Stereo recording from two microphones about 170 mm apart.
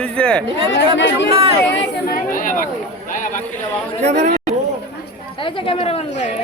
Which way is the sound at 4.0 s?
40° right (ahead or behind).